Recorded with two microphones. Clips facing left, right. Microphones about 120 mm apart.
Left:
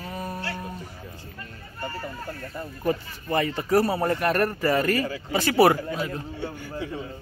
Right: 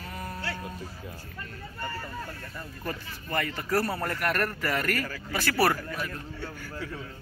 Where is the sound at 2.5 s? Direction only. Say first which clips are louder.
Left 11 dB; 20° left (ahead or behind).